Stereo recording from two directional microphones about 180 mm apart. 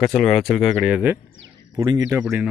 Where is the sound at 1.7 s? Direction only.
20° right (ahead or behind).